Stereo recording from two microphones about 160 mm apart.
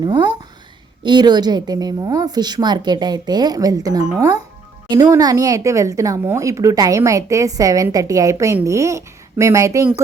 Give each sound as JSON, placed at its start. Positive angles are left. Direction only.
{"t": 0.0, "sound": "a woman's voice", "side_deg": -25}